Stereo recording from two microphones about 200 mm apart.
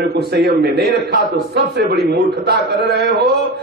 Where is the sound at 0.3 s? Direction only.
55° right (ahead or behind).